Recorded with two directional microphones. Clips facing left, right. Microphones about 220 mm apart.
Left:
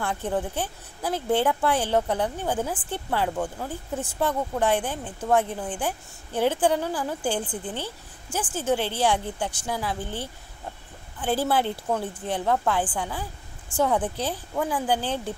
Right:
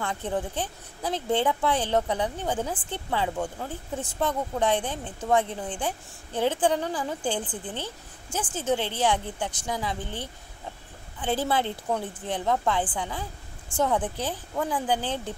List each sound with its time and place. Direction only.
0.0 s speech: 10° left (ahead or behind)